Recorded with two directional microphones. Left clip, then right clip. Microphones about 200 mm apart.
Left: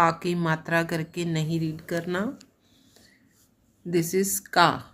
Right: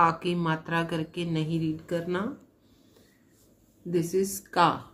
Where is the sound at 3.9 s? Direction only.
55° left (ahead or behind).